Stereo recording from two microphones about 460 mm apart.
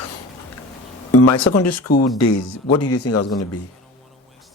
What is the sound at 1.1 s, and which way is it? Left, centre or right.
Speech, left.